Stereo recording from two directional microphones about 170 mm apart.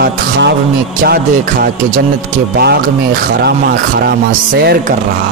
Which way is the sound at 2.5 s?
65° right (ahead or behind).